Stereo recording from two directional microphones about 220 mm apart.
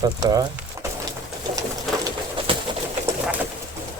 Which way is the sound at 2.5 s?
25° right (ahead or behind).